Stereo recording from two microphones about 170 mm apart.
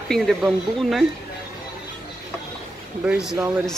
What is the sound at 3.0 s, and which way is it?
Speech, 5° right (ahead or behind).